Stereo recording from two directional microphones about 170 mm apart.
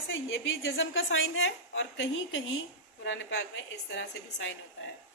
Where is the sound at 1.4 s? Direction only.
90° left.